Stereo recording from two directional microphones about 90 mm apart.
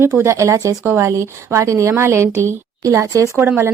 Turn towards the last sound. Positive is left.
turn(degrees=-30)  # may be behind; listen again after turning